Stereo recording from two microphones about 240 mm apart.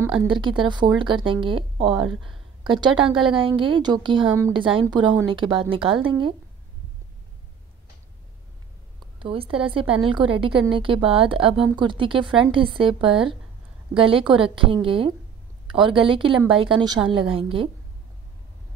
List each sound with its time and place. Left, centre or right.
0.3 s speech: centre
2.0 s speech: centre
2.6 s speech: centre
9.2 s speech: right
13.1 s speech: centre
13.9 s speech: right